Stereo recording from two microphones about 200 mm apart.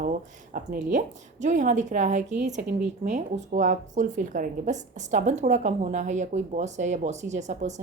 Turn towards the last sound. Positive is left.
turn(degrees=-35)  # may be behind; listen again after turning